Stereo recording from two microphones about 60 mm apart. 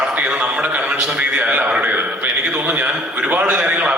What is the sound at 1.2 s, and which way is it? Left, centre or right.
A man's voice, right.